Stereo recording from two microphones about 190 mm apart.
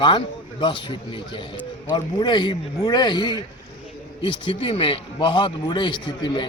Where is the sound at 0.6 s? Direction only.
25° left (ahead or behind).